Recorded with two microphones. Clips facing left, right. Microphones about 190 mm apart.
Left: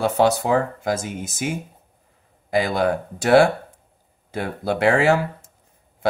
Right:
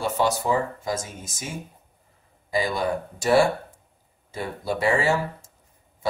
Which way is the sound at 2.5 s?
65° left (ahead or behind).